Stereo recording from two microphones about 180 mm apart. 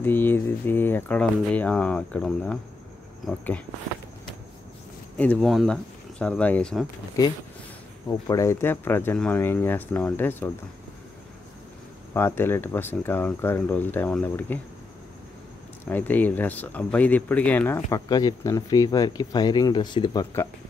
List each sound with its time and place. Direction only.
0.0 s speech: 10° left (ahead or behind)
5.1 s speech: 5° left (ahead or behind)
8.1 s speech: 20° left (ahead or behind)
12.1 s speech: 15° left (ahead or behind)
15.9 s speech: 10° left (ahead or behind)